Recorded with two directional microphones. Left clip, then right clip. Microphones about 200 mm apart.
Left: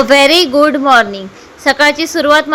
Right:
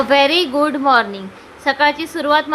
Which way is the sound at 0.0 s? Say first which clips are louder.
Left 6 dB; 20° left (ahead or behind).